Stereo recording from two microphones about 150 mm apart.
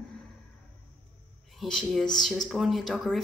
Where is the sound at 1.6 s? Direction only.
Centre (ahead or behind).